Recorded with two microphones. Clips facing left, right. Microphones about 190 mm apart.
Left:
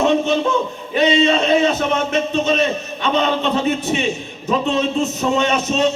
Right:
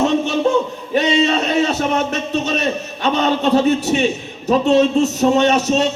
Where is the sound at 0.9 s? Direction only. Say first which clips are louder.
Left 1 dB; 40° right (ahead or behind).